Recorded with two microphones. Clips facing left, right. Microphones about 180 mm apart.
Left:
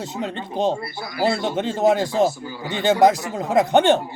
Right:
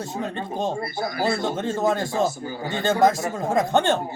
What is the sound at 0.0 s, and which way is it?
Speech, 20° left (ahead or behind).